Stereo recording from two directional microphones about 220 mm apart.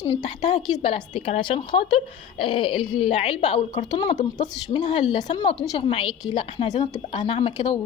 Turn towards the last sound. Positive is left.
turn(degrees=20)  # may be behind; listen again after turning